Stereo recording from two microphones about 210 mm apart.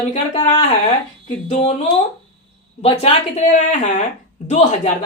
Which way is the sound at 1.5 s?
30° left (ahead or behind).